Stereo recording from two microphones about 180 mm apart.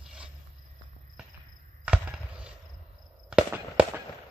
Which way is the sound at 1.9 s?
5° right (ahead or behind).